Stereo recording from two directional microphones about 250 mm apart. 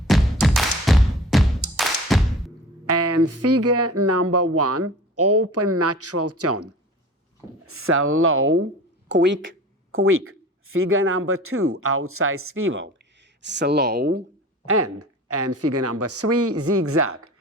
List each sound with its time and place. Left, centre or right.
0.1 s thump: centre
2.8 s speech: right
7.7 s speech: right
14.6 s speech: right